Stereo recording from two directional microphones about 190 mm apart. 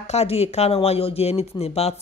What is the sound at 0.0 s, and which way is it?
Speech, 35° left (ahead or behind).